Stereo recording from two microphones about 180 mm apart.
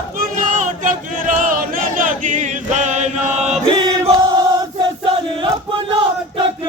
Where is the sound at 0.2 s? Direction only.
45° right (ahead or behind).